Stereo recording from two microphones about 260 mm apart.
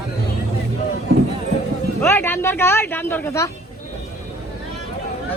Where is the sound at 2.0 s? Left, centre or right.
Centre.